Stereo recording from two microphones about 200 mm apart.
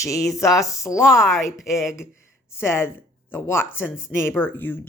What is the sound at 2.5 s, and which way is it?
Speech, 10° left (ahead or behind).